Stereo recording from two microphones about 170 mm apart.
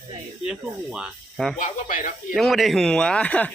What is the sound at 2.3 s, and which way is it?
Speech, centre (ahead or behind).